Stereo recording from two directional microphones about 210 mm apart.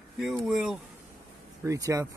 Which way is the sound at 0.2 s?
Centre (ahead or behind).